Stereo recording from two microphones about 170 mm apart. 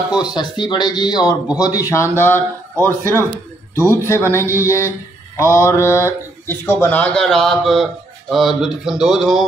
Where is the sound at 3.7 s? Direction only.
15° right (ahead or behind).